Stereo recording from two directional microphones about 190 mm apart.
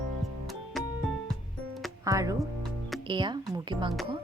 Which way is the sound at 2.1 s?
15° right (ahead or behind).